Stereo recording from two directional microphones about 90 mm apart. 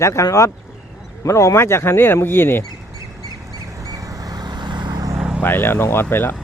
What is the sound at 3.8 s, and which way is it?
Vehicle, 40° right (ahead or behind).